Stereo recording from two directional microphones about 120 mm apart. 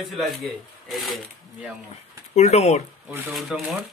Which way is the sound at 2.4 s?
65° left (ahead or behind).